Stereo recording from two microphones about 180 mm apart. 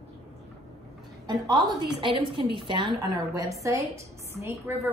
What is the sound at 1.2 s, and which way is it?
A woman's voice, 25° right (ahead or behind).